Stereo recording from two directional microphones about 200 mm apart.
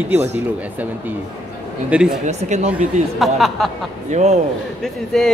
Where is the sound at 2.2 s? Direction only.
35° right (ahead or behind).